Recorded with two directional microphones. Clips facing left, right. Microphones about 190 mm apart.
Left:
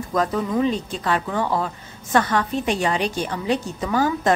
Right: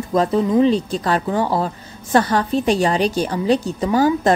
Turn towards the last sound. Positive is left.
turn(degrees=-35)  # may be behind; listen again after turning